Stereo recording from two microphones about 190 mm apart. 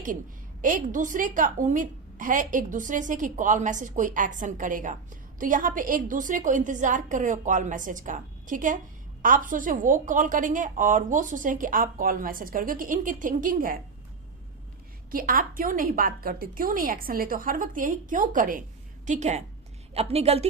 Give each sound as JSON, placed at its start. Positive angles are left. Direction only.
{"t": 0.6, "sound": "a woman's voice", "side_deg": -45}
{"t": 15.1, "sound": "a woman's voice", "side_deg": -50}